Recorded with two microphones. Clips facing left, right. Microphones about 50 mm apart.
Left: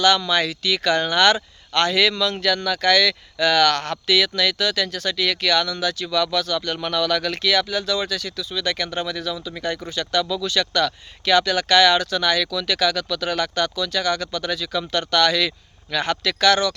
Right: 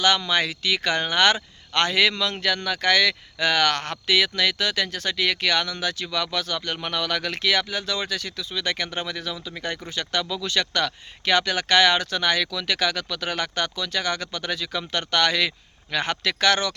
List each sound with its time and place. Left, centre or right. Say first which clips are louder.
0.0 s speech: left 3 dB; right